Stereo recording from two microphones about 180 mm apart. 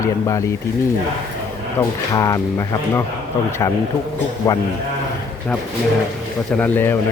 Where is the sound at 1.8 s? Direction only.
20° left (ahead or behind).